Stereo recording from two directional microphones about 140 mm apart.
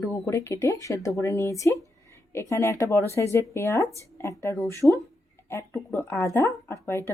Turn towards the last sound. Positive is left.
turn(degrees=15)  # may be behind; listen again after turning